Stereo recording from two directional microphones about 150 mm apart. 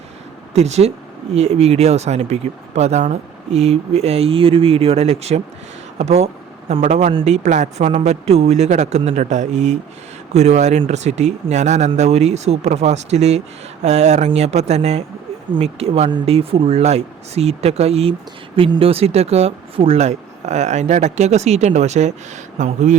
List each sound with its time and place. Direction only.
0.5 s speech: 45° right (ahead or behind)